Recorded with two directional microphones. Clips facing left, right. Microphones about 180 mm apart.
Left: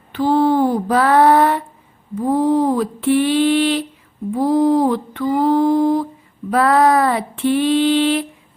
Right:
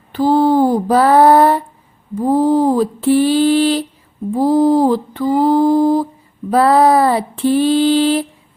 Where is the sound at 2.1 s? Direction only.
35° right (ahead or behind).